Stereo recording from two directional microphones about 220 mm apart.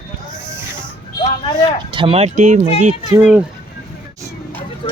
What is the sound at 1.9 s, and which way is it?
Speech, 25° right (ahead or behind).